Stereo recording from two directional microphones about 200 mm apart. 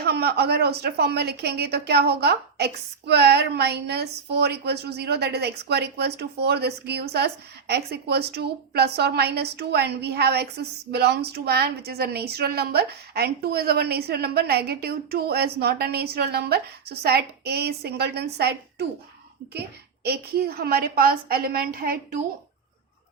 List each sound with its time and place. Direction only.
0.0 s a woman's voice: 55° right (ahead or behind)
20.1 s a woman's voice: 50° right (ahead or behind)